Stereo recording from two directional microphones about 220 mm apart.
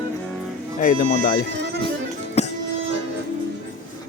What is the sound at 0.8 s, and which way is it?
Speech, 40° left (ahead or behind).